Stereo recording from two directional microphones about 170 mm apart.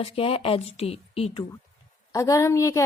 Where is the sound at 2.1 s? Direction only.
20° left (ahead or behind).